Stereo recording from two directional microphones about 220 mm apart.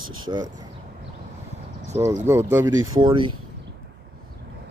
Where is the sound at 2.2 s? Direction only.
10° right (ahead or behind).